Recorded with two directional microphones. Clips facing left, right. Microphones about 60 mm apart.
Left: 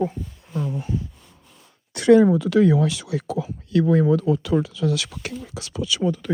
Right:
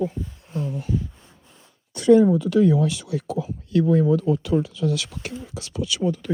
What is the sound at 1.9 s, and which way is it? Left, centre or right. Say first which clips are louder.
Speech: left 1 dB; left.